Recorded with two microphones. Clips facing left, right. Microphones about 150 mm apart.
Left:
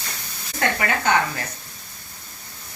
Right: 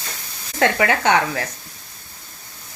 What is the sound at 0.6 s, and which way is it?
Speech, 90° right.